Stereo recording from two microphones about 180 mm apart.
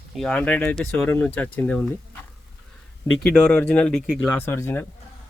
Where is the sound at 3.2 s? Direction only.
5° left (ahead or behind).